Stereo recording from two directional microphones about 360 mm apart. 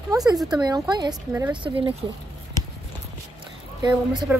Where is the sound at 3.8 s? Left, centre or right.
Centre.